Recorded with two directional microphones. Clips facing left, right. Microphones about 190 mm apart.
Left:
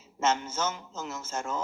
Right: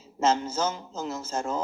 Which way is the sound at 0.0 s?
35° right (ahead or behind).